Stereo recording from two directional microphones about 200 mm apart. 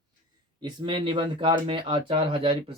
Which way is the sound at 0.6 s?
25° right (ahead or behind).